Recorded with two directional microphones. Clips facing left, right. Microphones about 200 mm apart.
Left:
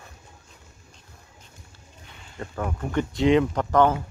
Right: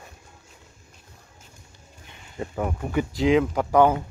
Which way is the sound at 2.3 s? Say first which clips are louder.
Right 3 dB; 10° right (ahead or behind).